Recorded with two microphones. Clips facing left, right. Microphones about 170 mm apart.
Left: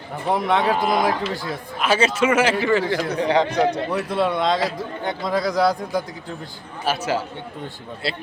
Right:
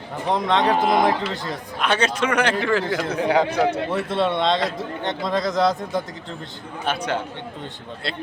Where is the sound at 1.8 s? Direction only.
5° left (ahead or behind).